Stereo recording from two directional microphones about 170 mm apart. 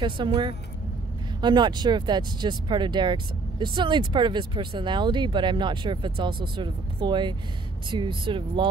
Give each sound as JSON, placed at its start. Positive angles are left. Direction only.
{"t": 0.0, "sound": "speech", "side_deg": -30}